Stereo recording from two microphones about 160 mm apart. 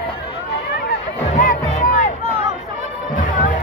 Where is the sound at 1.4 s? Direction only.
50° left (ahead or behind).